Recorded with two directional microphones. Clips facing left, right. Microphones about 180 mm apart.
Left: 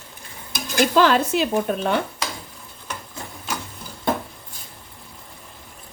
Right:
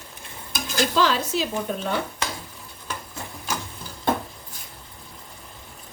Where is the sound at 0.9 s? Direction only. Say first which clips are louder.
Left 6 dB; 55° left (ahead or behind).